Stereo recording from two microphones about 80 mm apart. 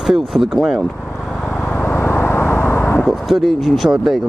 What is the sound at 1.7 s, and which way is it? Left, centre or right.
Vehicle, left.